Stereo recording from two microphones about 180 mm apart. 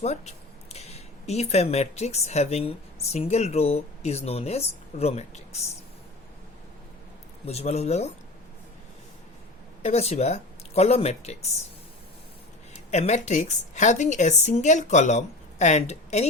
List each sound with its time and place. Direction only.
0.0 s speech: 35° left (ahead or behind)
7.4 s a woman's voice: 35° left (ahead or behind)
9.8 s a woman's voice: 35° left (ahead or behind)
12.9 s a woman's voice: 40° left (ahead or behind)